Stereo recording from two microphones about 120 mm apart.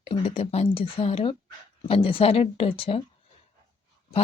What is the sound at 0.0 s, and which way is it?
Speech, 55° left (ahead or behind).